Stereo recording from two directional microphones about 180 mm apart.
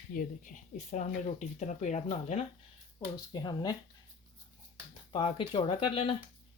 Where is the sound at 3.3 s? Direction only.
25° left (ahead or behind).